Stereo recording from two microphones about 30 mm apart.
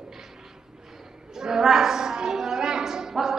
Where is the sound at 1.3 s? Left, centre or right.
Centre.